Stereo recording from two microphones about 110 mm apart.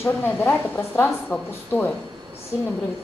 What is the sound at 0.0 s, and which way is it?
A woman's voice, 25° left (ahead or behind).